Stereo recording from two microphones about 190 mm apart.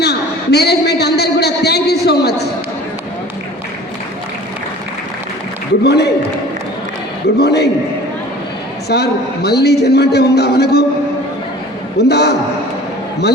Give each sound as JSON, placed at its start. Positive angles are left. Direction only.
{"t": 0.0, "sound": "a sound", "side_deg": 60}
{"t": 5.8, "sound": "a man's voice", "side_deg": 60}
{"t": 7.3, "sound": "a man's voice", "side_deg": 60}
{"t": 8.9, "sound": "a man's voice", "side_deg": 60}
{"t": 11.9, "sound": "a man's voice", "side_deg": 60}